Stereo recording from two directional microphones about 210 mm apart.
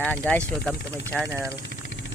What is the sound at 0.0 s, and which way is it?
Speech, 5° left (ahead or behind).